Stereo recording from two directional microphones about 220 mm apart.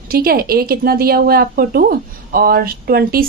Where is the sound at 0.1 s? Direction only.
45° right (ahead or behind).